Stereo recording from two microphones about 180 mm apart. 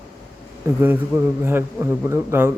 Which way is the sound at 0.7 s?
10° right (ahead or behind).